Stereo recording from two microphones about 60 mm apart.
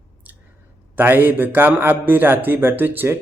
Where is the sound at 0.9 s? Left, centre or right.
Right.